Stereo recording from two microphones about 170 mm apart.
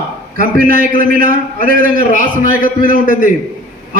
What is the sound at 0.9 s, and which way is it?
A man's voice, 55° right (ahead or behind).